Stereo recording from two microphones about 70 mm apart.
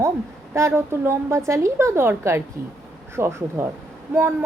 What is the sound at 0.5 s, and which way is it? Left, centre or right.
A woman's voice, right.